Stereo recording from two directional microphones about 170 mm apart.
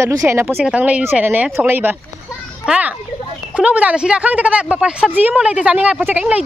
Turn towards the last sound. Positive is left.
turn(degrees=-10)  # may be behind; listen again after turning